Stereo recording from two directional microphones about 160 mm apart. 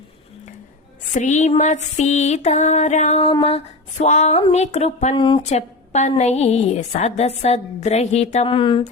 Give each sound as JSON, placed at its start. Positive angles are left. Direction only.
{"t": 1.1, "sound": "a woman's voice", "side_deg": 50}
{"t": 5.1, "sound": "a woman's voice", "side_deg": 30}
{"t": 5.5, "sound": "a woman's voice", "side_deg": 45}